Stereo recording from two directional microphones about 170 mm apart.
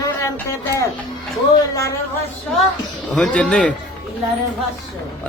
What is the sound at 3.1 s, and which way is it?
Speech, 5° left (ahead or behind).